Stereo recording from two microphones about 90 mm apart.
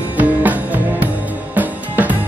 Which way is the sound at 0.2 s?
20° right (ahead or behind).